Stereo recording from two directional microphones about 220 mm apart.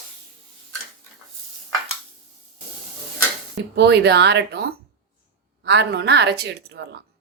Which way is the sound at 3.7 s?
50° right (ahead or behind).